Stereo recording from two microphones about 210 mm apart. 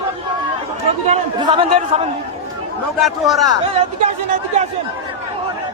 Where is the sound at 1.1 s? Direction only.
20° right (ahead or behind).